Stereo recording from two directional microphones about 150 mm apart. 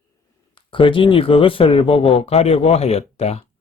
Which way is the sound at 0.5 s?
35° left (ahead or behind).